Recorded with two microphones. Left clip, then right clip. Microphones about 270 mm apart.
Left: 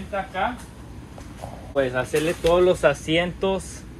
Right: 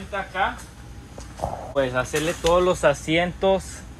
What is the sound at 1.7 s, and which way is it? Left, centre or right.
Speech, right.